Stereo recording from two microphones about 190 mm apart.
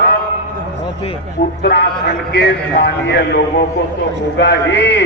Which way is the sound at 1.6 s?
55° left (ahead or behind).